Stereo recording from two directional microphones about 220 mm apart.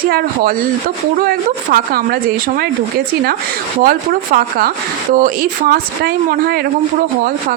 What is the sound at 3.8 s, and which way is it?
Speech, 40° right (ahead or behind).